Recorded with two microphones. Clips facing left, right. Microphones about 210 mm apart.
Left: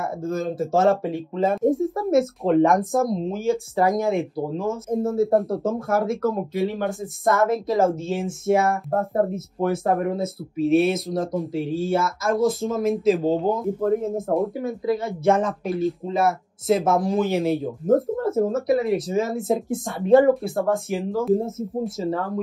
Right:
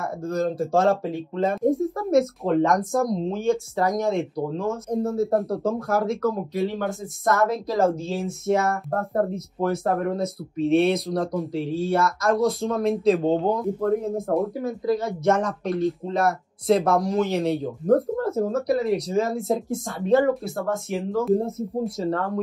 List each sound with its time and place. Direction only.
0.2 s speech: centre (ahead or behind)